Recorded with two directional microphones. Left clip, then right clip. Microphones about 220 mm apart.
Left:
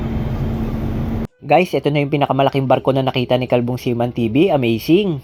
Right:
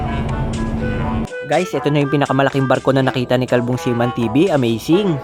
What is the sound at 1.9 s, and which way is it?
Speech, 10° right (ahead or behind).